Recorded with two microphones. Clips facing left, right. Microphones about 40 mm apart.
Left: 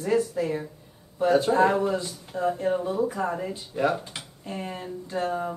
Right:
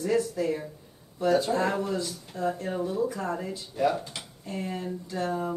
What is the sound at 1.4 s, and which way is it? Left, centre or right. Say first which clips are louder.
Speech: left 6 dB; centre.